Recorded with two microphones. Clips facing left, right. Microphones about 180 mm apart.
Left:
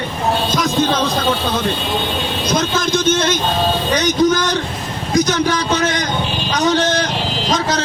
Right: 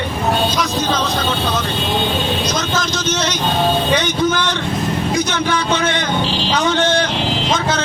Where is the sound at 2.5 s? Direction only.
55° left (ahead or behind).